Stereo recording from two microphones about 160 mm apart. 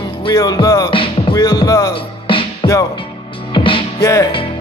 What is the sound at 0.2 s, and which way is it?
Music, 25° left (ahead or behind).